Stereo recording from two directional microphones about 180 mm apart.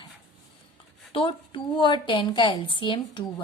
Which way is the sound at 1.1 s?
30° left (ahead or behind).